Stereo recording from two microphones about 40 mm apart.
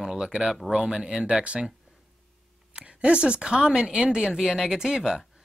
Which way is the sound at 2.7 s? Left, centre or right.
Right.